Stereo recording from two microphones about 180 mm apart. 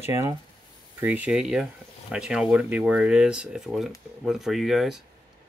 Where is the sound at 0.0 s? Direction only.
15° right (ahead or behind).